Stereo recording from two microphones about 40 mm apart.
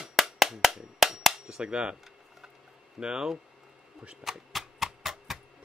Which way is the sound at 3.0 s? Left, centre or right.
Centre.